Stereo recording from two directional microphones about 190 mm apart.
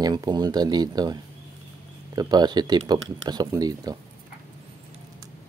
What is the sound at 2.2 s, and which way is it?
Speech, 20° right (ahead or behind).